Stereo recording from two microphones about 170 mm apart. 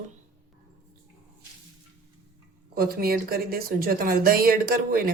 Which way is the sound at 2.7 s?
60° right (ahead or behind).